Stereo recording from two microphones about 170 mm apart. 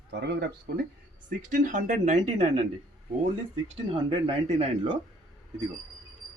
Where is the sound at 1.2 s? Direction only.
50° right (ahead or behind).